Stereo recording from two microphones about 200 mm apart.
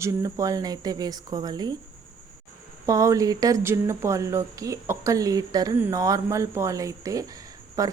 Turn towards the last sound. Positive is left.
turn(degrees=-15)  # may be behind; listen again after turning